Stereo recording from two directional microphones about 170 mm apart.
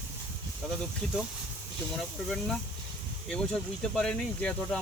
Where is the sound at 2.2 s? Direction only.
Centre (ahead or behind).